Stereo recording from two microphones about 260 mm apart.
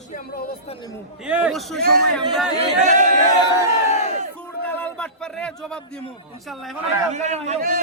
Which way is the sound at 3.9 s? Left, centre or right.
Left.